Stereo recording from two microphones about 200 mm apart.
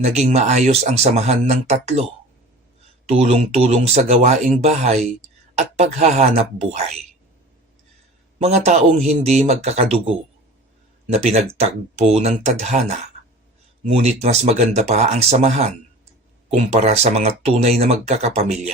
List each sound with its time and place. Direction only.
0.0 s speech: 35° right (ahead or behind)
3.1 s speech: 30° right (ahead or behind)
8.4 s speech: 35° right (ahead or behind)